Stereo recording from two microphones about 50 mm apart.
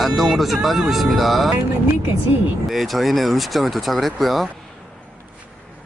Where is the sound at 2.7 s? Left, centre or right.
Centre.